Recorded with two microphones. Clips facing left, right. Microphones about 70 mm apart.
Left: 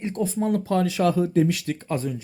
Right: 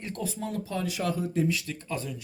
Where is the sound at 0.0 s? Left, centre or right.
Left.